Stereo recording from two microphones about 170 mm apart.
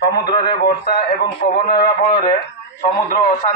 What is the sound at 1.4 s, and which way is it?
Speech, 65° left (ahead or behind).